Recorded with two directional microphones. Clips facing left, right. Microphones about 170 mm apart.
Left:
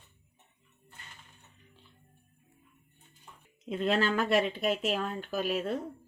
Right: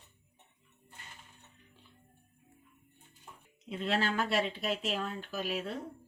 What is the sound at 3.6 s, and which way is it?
Speech, 50° left (ahead or behind).